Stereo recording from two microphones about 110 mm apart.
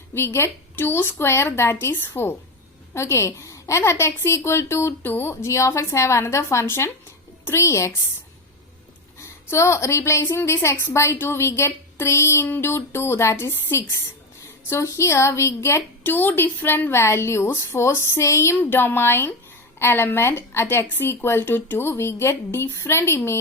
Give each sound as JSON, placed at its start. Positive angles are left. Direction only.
{"t": 0.1, "sound": "a woman's voice", "side_deg": 20}
{"t": 9.1, "sound": "a woman's voice", "side_deg": 25}